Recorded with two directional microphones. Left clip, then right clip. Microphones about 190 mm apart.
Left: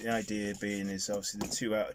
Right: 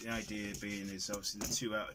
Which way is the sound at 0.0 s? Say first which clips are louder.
Left 7 dB; 40° left (ahead or behind).